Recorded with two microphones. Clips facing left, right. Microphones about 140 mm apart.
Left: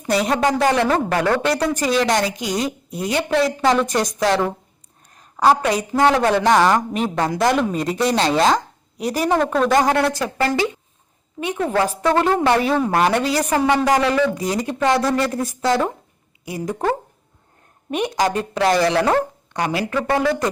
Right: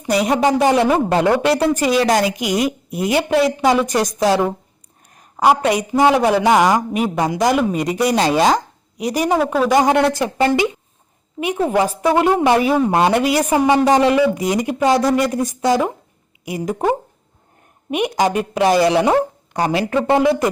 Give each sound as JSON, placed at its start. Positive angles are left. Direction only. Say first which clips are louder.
{"t": 0.0, "sound": "a woman's voice", "louder": "right 2 dB", "side_deg": -5}
{"t": 0.3, "sound": "speech", "louder": "right 4 dB", "side_deg": -15}
{"t": 1.5, "sound": "a woman's voice", "louder": "right 3 dB", "side_deg": -5}
{"t": 2.9, "sound": "a woman's voice", "louder": "right 3 dB", "side_deg": -20}
{"t": 4.2, "sound": "a woman's voice", "louder": "right 3 dB", "side_deg": -15}
{"t": 9.7, "sound": "speech", "louder": "right 5 dB", "side_deg": -20}
{"t": 11.7, "sound": "speech", "louder": "right 1 dB", "side_deg": -15}
{"t": 18.3, "sound": "speech", "louder": "right 3 dB", "side_deg": -15}
{"t": 19.5, "sound": "speech", "louder": "right 4 dB", "side_deg": -30}